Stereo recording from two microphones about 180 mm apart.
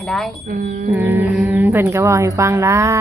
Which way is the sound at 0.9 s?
10° right (ahead or behind).